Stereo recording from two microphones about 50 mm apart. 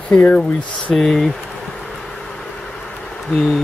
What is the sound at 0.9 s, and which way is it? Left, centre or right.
Speech, centre.